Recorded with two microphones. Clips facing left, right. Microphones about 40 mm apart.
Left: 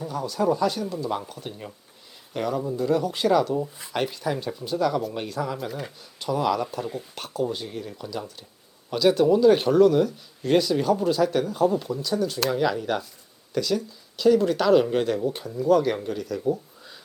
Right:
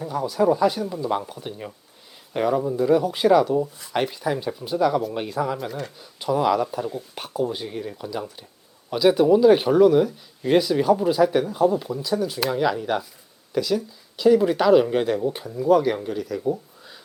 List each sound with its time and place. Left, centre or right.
0.0 s speech: centre